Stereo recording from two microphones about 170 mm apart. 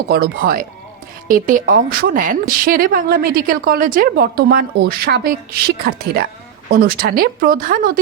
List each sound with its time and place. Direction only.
0.1 s a woman's voice: 60° right (ahead or behind)